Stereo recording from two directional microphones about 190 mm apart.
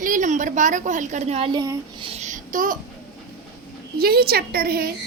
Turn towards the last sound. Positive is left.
turn(degrees=-55)  # may be behind; listen again after turning